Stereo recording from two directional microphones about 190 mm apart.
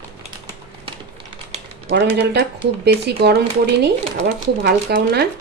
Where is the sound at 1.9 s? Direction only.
65° right (ahead or behind).